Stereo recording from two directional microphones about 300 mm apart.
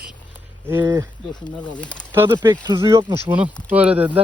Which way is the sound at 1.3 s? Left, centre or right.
Centre.